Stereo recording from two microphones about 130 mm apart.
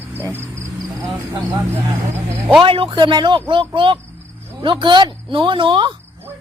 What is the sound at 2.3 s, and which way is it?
Speech, 10° right (ahead or behind).